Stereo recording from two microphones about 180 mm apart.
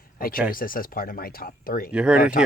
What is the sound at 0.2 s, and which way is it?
Speech, 50° left (ahead or behind).